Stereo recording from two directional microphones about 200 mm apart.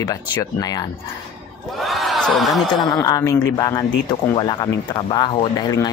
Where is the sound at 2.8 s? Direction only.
20° left (ahead or behind).